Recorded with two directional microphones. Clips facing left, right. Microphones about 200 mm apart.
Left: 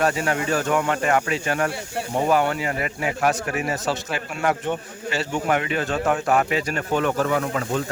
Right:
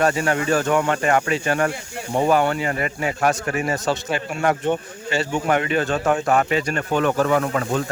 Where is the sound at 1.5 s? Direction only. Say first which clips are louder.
Right 3 dB; 45° right (ahead or behind).